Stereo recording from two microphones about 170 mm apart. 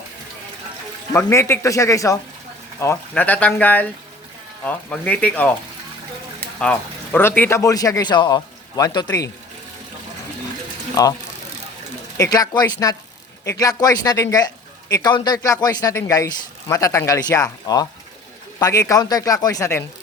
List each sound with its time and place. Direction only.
1.1 s speech: 15° left (ahead or behind)
6.6 s speech: 10° left (ahead or behind)
12.1 s speech: 20° left (ahead or behind)